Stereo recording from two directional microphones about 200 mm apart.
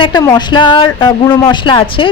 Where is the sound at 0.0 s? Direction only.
20° left (ahead or behind).